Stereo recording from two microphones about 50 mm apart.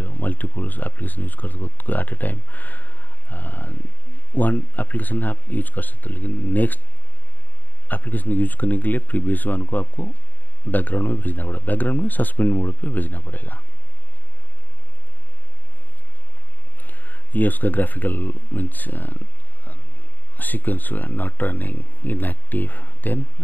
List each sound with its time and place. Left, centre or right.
0.0 s speech: left
7.9 s speech: left
16.8 s speech: left